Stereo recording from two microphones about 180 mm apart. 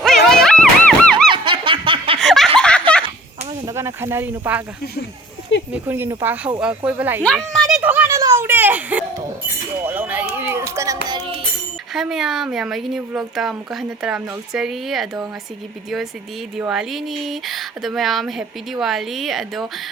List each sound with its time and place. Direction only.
0.0 s music: centre (ahead or behind)
1.3 s snicker: 25° right (ahead or behind)
2.1 s laughter: centre (ahead or behind)
2.6 s giggle: 5° left (ahead or behind)
3.7 s snake: 15° right (ahead or behind)
5.7 s speech: 10° right (ahead or behind)
7.2 s speech: centre (ahead or behind)
7.8 s a sound: 10° right (ahead or behind)
9.8 s speech: 10° right (ahead or behind)
11.9 s speech: 5° right (ahead or behind)
16.6 s speech: 5° right (ahead or behind)